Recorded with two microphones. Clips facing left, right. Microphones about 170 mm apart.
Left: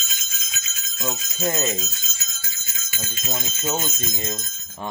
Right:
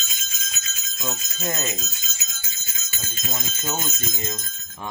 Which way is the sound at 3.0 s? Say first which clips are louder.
Left 2 dB; 35° left (ahead or behind).